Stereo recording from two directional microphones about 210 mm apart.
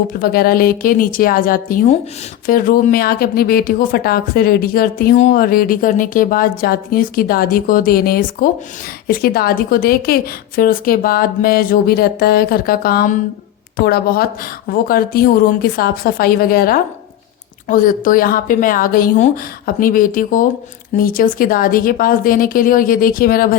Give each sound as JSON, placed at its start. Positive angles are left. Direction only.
{"t": 0.2, "sound": "speech", "side_deg": 45}